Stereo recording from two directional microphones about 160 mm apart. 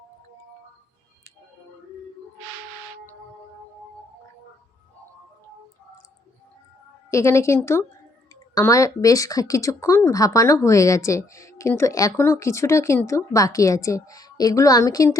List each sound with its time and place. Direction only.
7.1 s a woman's voice: 15° left (ahead or behind)